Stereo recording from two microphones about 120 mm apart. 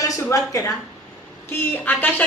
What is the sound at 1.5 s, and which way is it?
Speech, 15° left (ahead or behind).